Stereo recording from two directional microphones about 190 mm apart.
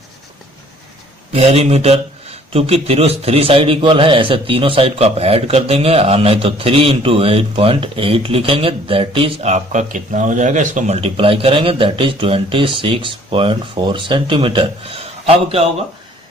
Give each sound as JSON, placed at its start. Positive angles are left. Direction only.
{"t": 1.3, "sound": "a man's voice", "side_deg": -35}